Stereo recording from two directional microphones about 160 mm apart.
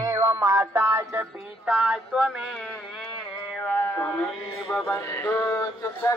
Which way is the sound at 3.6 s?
10° left (ahead or behind).